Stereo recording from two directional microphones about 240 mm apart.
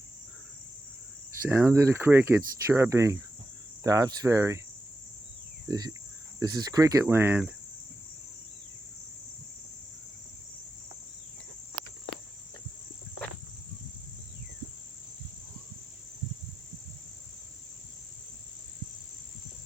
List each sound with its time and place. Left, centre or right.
1.3 s speech: centre
5.6 s speech: centre